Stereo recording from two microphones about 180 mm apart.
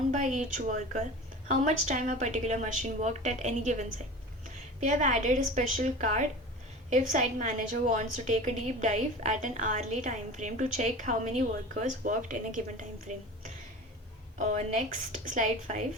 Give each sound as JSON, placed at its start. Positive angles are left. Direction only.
{"t": 0.1, "sound": "a woman's voice", "side_deg": -40}